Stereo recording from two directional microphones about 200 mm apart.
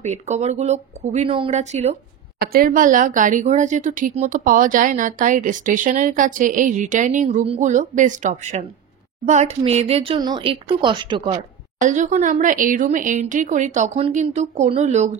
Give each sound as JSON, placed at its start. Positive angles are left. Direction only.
{"t": 0.0, "sound": "a woman's voice", "side_deg": -35}
{"t": 2.4, "sound": "a woman's voice", "side_deg": -45}
{"t": 11.8, "sound": "a woman's voice", "side_deg": -40}